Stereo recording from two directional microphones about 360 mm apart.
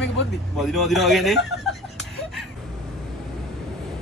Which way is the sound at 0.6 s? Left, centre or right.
Centre.